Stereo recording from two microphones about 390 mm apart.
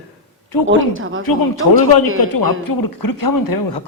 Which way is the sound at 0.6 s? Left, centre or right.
Right.